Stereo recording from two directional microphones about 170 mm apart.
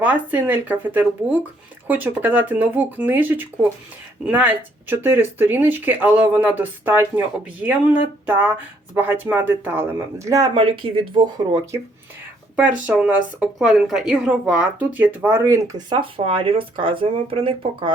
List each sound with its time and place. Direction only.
0.0 s a woman's voice: 10° right (ahead or behind); by 11.2 s 30° right (ahead or behind)
12.5 s a woman's voice: 5° right (ahead or behind); by 17.9 s 30° right (ahead or behind)